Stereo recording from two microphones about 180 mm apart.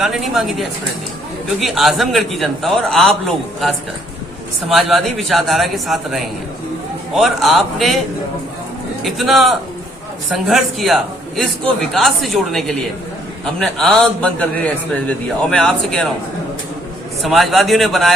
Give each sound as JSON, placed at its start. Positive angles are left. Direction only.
{"t": 0.0, "sound": "a man's voice", "side_deg": 0}
{"t": 9.0, "sound": "a man's voice", "side_deg": 0}
{"t": 17.2, "sound": "a man's voice", "side_deg": 0}